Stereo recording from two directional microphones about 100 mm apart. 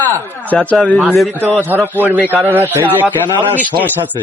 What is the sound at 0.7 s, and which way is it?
Speech, 15° left (ahead or behind).